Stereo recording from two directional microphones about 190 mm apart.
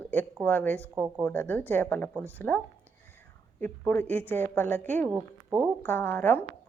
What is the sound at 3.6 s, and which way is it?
A woman's voice, 10° left (ahead or behind).